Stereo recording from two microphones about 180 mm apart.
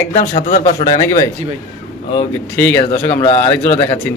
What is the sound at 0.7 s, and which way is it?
Speech, 20° left (ahead or behind).